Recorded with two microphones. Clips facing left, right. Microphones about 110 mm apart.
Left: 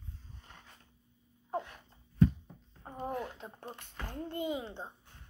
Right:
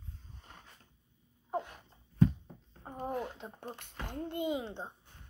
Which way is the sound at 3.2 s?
20° right (ahead or behind).